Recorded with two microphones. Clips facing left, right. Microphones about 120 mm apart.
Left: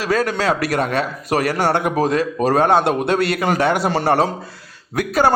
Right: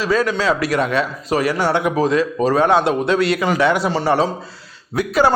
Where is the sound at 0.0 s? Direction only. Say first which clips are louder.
Right 1 dB; 55° left (ahead or behind).